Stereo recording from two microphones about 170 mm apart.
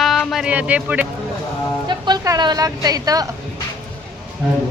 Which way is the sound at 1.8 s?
25° right (ahead or behind).